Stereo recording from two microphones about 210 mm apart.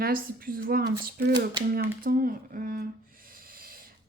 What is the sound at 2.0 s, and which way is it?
Speech, 45° right (ahead or behind).